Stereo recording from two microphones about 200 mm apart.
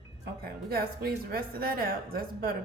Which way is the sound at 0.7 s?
50° right (ahead or behind).